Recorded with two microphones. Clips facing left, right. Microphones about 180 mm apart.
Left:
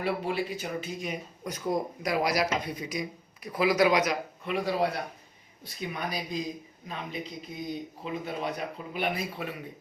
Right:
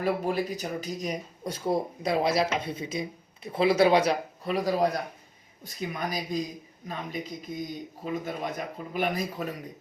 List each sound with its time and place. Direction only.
0.0 s a man's voice: 45° right (ahead or behind)